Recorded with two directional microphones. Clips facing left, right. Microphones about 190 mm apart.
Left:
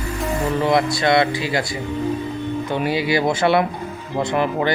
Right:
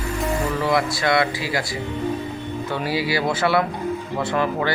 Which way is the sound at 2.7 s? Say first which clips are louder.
Left 3 dB; 20° left (ahead or behind).